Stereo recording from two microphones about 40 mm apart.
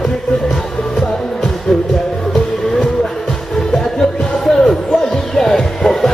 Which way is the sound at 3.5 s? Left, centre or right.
Centre.